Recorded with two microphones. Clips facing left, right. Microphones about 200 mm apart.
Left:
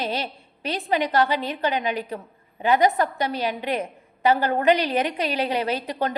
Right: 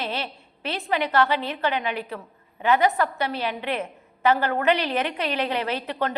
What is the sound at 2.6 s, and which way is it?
A woman's voice, 15° left (ahead or behind).